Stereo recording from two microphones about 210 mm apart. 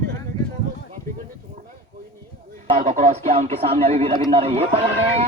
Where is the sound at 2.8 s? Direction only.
35° right (ahead or behind).